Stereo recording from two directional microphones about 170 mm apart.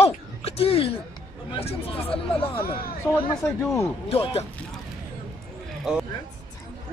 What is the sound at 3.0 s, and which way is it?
Speech, 15° left (ahead or behind).